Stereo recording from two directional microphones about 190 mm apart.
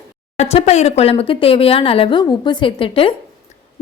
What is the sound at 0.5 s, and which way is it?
A woman's voice, 35° left (ahead or behind).